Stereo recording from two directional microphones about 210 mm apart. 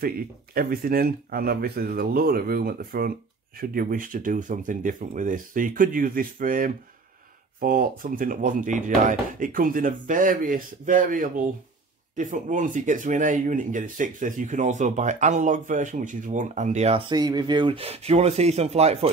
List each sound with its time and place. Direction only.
0.6 s speech: 45° right (ahead or behind)